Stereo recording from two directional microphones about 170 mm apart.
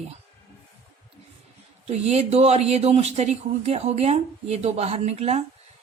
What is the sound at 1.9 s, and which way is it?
Speech, 40° right (ahead or behind).